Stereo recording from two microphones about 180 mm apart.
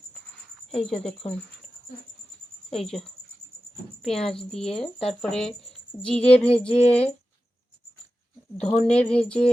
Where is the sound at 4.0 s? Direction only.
Centre (ahead or behind).